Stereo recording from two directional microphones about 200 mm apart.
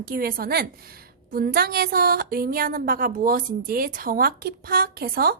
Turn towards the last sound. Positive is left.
turn(degrees=-50)  # may be behind; listen again after turning